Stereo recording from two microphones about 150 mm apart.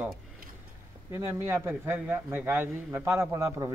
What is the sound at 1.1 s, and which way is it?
A man's voice, 15° right (ahead or behind).